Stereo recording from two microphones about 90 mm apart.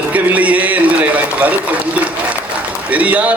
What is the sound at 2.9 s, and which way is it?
Speech, 15° right (ahead or behind).